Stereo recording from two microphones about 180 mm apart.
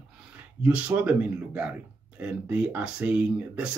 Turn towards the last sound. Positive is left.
turn(degrees=-5)  # may be behind; listen again after turning